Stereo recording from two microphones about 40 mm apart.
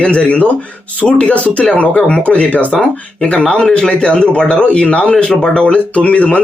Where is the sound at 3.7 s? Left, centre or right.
Centre.